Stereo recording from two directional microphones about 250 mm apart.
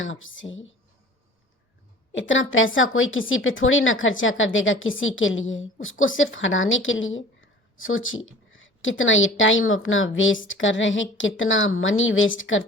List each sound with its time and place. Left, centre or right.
0.0 s speech: left
2.1 s speech: left